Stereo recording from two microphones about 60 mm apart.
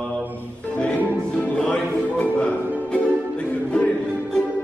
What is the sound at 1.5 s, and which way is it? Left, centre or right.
Music, centre.